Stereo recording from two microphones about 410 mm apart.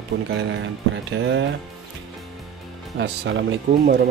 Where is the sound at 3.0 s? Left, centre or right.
Right.